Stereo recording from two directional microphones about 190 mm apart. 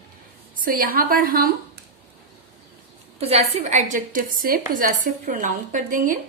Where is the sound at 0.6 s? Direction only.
50° right (ahead or behind).